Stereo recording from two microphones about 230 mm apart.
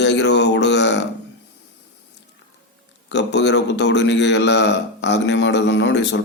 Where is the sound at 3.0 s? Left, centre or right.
Left.